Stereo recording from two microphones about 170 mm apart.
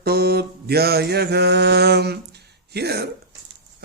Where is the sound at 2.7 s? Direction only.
70° right (ahead or behind).